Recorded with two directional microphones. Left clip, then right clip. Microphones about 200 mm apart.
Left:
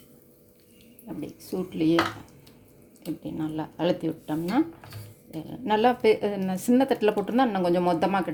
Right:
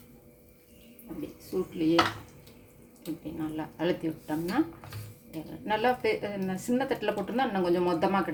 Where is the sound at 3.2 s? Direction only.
45° left (ahead or behind).